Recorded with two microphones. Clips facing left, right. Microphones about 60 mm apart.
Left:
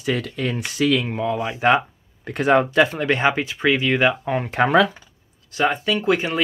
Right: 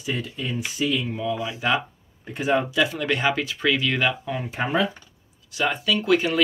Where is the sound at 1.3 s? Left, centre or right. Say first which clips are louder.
Left 8 dB; left.